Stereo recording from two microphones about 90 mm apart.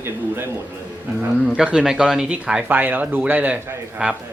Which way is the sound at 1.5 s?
10° right (ahead or behind).